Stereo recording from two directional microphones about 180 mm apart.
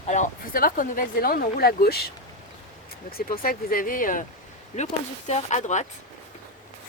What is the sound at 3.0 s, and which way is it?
Speech, 55° left (ahead or behind).